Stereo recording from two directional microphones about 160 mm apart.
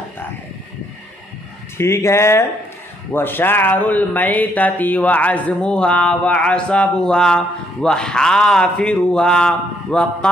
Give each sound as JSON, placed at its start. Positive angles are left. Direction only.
{"t": 1.8, "sound": "speech", "side_deg": 15}